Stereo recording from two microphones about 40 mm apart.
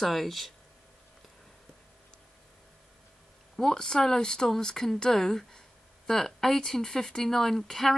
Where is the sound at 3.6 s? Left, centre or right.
Centre.